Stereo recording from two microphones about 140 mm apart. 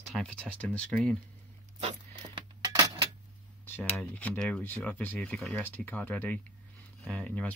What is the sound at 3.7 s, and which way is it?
Speech, 10° left (ahead or behind).